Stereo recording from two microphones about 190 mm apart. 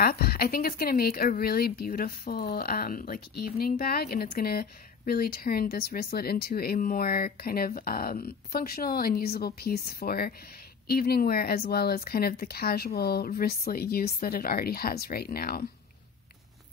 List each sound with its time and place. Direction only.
0.0 s speech: 50° left (ahead or behind)